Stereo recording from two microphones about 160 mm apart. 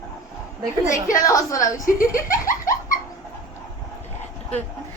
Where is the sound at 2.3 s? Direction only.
60° left (ahead or behind).